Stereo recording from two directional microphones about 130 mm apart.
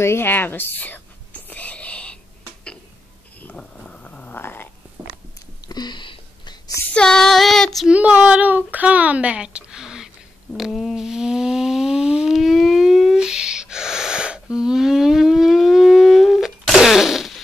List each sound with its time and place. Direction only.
0.0 s whispering: 20° left (ahead or behind)
3.4 s cat: 5° left (ahead or behind)
5.7 s a sound: 35° left (ahead or behind)
6.9 s child singing: 5° left (ahead or behind)
7.9 s speech: 10° right (ahead or behind)
10.5 s a sound: 5° left (ahead or behind)